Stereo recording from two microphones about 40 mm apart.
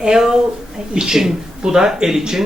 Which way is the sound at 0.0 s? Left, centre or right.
Centre.